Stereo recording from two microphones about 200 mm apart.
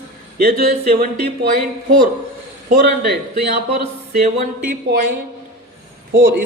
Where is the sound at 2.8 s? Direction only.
55° right (ahead or behind).